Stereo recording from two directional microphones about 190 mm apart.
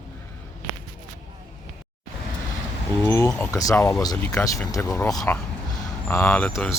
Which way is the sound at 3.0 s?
15° left (ahead or behind).